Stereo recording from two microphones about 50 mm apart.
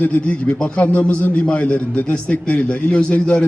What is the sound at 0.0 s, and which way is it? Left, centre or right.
A man's voice, left.